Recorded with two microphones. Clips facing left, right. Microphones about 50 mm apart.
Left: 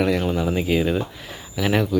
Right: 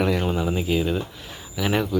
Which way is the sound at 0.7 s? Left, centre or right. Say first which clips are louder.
Left 3 dB; centre.